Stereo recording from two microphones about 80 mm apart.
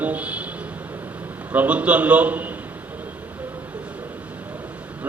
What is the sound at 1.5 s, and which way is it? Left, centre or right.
A man's voice, centre.